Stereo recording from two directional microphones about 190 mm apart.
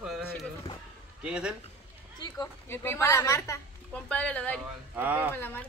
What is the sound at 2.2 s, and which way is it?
A woman's voice, 15° left (ahead or behind).